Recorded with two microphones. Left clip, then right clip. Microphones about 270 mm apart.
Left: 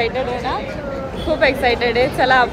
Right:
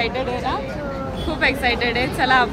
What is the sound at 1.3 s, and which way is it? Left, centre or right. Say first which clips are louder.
Speech: left 4 dB; centre.